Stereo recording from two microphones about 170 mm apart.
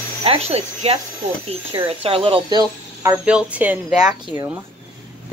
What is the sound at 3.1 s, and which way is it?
Speech, 5° right (ahead or behind).